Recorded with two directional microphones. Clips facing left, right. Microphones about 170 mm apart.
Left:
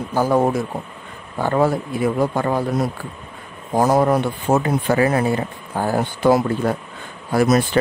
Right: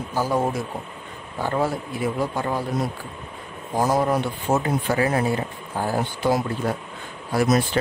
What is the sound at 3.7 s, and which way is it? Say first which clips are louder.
Speech: left 5 dB; 60° left (ahead or behind).